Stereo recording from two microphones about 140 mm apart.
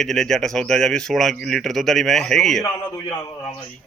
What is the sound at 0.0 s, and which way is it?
Speech, centre (ahead or behind).